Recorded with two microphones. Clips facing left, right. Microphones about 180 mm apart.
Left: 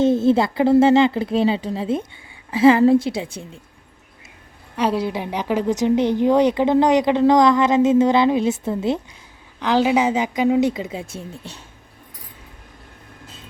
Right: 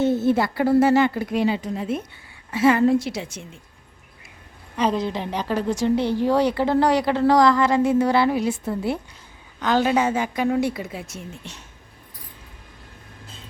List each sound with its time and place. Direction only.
0.0 s a woman's voice: 25° left (ahead or behind)
4.8 s a woman's voice: 10° left (ahead or behind)
9.6 s a woman's voice: 10° left (ahead or behind)
11.2 s speech: 35° left (ahead or behind)